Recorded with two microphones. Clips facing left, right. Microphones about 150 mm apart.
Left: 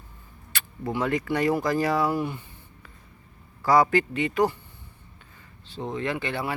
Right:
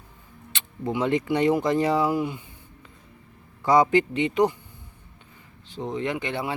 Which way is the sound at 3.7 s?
20° right (ahead or behind).